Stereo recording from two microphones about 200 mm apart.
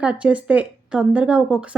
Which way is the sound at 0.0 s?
5° right (ahead or behind).